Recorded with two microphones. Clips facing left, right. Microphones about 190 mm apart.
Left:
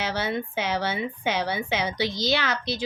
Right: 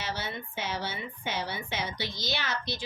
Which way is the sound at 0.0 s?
90° left.